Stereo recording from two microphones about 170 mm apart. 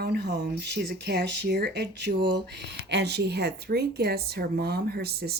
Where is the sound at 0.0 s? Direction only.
75° right (ahead or behind).